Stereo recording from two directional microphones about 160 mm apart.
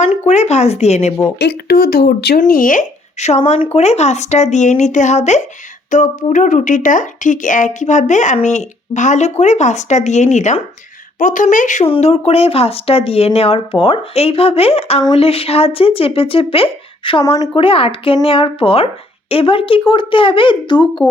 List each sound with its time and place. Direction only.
0.0 s speech: 45° left (ahead or behind)
1.4 s speech: 90° left
2.4 s speech: 60° left (ahead or behind)
11.9 s speech: 40° left (ahead or behind)